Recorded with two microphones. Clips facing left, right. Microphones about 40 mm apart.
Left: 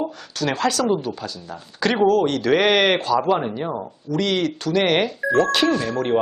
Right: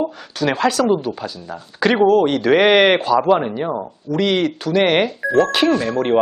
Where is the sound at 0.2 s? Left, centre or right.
Centre.